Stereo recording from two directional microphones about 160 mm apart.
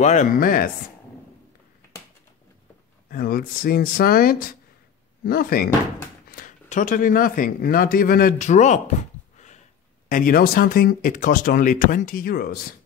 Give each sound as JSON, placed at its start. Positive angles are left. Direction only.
{"t": 0.0, "sound": "speech", "side_deg": 45}
{"t": 3.1, "sound": "speech", "side_deg": 65}
{"t": 6.3, "sound": "speech", "side_deg": 55}
{"t": 10.0, "sound": "speech", "side_deg": 60}